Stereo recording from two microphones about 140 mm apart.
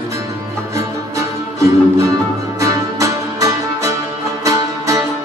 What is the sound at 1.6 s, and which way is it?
Music, 20° right (ahead or behind).